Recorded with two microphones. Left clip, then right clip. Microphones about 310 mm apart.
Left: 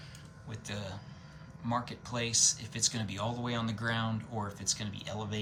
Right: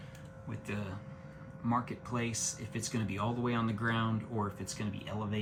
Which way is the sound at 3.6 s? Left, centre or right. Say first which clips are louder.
Even; left.